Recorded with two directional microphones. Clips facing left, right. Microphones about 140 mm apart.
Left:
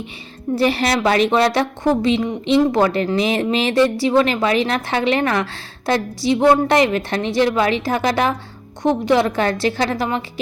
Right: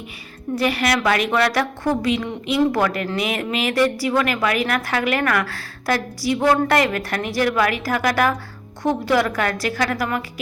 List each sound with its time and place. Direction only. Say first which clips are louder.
0.5 s a woman's voice: left 3 dB; 30° left (ahead or behind)